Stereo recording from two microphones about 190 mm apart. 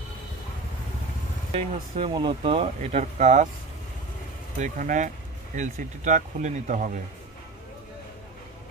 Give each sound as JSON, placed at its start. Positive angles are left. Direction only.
{"t": 1.5, "sound": "speech", "side_deg": -30}
{"t": 4.6, "sound": "speech", "side_deg": -45}